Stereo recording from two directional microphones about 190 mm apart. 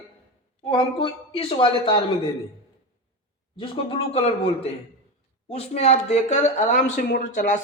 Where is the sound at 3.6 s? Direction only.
30° left (ahead or behind).